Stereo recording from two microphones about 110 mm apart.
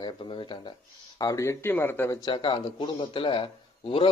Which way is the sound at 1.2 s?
30° left (ahead or behind).